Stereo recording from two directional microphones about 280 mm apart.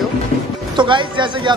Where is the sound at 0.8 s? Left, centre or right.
Centre.